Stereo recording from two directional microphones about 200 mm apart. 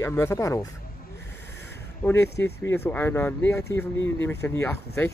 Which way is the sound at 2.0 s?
10° left (ahead or behind).